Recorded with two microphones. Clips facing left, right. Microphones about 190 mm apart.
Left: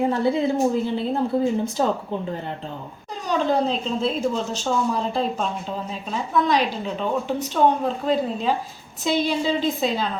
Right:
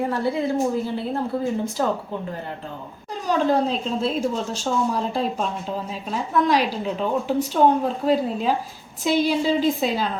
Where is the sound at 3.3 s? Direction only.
5° right (ahead or behind).